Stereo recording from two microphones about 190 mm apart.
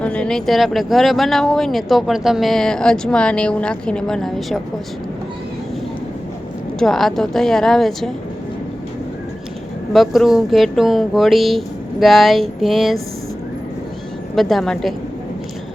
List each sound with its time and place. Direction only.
0.0 s speech: 5° left (ahead or behind)
6.7 s speech: centre (ahead or behind)
9.9 s speech: centre (ahead or behind)
14.3 s speech: centre (ahead or behind)